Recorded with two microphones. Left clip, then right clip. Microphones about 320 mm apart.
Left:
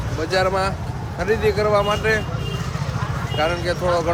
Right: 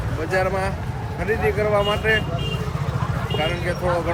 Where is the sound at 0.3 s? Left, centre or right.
Centre.